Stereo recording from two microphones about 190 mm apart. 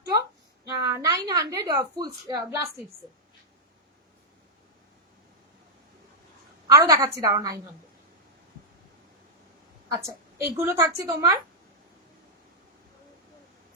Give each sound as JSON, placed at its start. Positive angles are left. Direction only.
{"t": 0.0, "sound": "a sound", "side_deg": -20}
{"t": 6.7, "sound": "a woman's voice", "side_deg": -20}
{"t": 9.9, "sound": "a woman's voice", "side_deg": -20}